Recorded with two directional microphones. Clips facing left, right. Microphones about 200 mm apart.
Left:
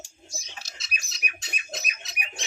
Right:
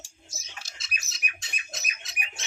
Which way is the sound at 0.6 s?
50° right (ahead or behind).